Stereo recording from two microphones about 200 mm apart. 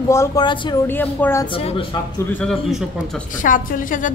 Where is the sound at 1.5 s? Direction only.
30° left (ahead or behind).